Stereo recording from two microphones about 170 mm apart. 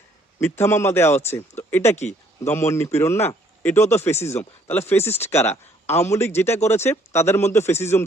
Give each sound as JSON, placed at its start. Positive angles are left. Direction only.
{"t": 0.3, "sound": "speech", "side_deg": 15}
{"t": 2.0, "sound": "speech", "side_deg": 40}
{"t": 2.5, "sound": "speech", "side_deg": 15}